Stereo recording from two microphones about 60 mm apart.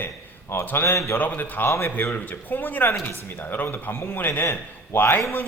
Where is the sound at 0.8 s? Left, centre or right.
Left.